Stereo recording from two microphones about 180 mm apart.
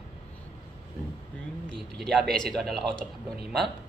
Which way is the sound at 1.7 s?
70° right (ahead or behind).